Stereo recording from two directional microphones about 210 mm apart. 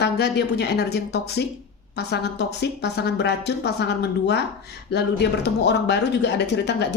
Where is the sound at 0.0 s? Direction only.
50° left (ahead or behind).